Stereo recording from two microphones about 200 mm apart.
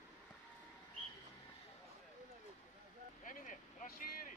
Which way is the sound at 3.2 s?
40° left (ahead or behind).